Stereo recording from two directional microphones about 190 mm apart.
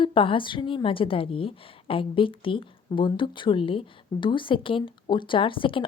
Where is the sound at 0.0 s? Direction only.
25° left (ahead or behind).